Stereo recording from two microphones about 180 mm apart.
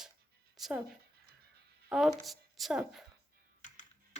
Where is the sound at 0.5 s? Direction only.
Centre (ahead or behind).